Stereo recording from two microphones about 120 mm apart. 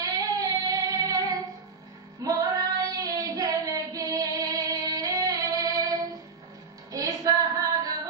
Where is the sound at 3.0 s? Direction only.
30° right (ahead or behind).